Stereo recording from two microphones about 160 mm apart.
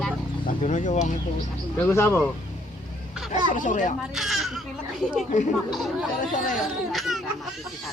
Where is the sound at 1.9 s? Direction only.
15° left (ahead or behind).